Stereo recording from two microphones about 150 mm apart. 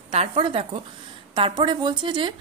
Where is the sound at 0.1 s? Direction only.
40° right (ahead or behind).